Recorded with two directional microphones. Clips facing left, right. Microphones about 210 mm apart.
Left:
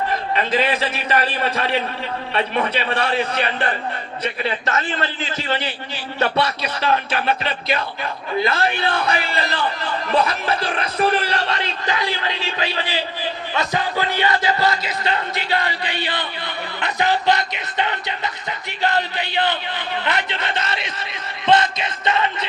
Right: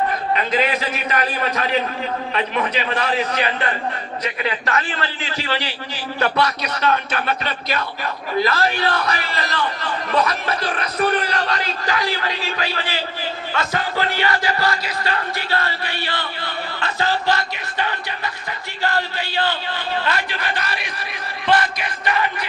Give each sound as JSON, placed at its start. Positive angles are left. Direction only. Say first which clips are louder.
{"t": 0.5, "sound": "music", "louder": "left 2 dB", "side_deg": 30}
{"t": 2.3, "sound": "a man's voice", "louder": "left 3 dB", "side_deg": 30}
{"t": 4.2, "sound": "music", "louder": "left 1 dB", "side_deg": 30}
{"t": 6.1, "sound": "music", "louder": "even", "side_deg": 25}